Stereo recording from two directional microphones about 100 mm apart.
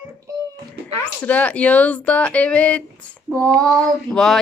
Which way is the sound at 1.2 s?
15° left (ahead or behind).